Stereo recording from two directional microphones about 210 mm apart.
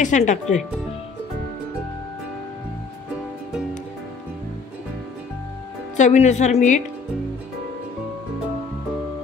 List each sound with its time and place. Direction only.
0.0 s a woman's voice: 35° left (ahead or behind)
5.9 s a woman's voice: 35° left (ahead or behind)